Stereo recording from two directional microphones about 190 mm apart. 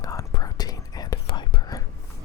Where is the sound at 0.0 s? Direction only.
20° left (ahead or behind).